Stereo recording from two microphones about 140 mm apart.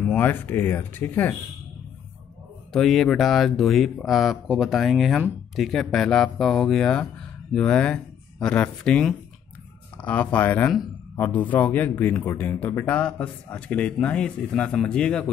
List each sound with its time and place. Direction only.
0.1 s speech: 15° left (ahead or behind)
2.7 s speech: centre (ahead or behind)